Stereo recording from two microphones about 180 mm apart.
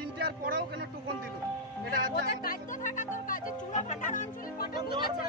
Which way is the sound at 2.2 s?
50° left (ahead or behind).